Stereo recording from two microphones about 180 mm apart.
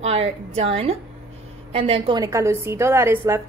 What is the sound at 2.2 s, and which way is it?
A woman's voice, 15° right (ahead or behind).